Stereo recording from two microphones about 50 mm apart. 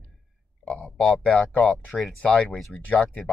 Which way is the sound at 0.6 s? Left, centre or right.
Left.